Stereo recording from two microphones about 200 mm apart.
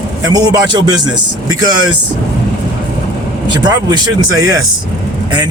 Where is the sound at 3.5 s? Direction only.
20° right (ahead or behind).